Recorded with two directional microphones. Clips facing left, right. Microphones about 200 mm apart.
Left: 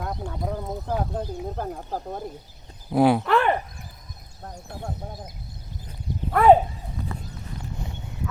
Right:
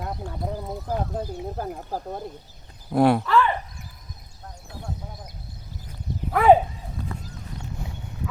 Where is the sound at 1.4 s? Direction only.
5° right (ahead or behind).